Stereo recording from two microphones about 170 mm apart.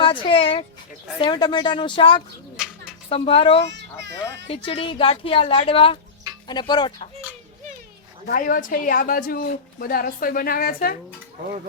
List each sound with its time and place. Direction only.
0.0 s speech: 30° left (ahead or behind)
8.3 s a woman's voice: 55° left (ahead or behind)